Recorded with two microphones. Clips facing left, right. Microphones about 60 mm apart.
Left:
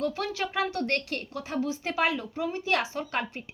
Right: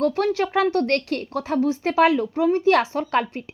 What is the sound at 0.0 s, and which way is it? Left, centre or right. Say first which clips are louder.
Speech: right 9 dB; right.